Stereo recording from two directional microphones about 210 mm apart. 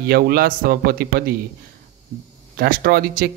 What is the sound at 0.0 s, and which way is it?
Speech, 45° right (ahead or behind).